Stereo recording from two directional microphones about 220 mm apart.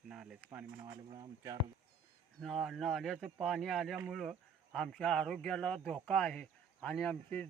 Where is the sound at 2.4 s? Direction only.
Centre (ahead or behind).